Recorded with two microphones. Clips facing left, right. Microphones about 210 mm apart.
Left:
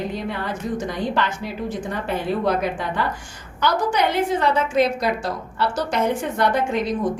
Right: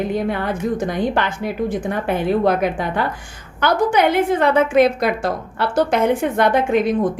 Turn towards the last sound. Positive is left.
turn(degrees=-55)  # may be behind; listen again after turning